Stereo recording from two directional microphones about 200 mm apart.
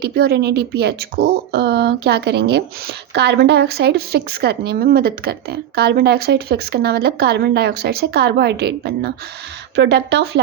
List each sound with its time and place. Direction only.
0.0 s speech: 55° right (ahead or behind)